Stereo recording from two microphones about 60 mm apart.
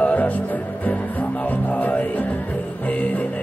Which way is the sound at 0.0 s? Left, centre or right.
Left.